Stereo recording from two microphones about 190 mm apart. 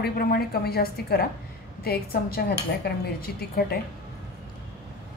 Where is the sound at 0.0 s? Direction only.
55° left (ahead or behind).